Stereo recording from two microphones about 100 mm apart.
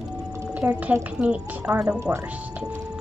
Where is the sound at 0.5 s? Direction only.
15° right (ahead or behind).